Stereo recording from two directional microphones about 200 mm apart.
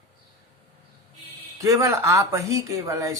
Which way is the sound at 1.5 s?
15° right (ahead or behind).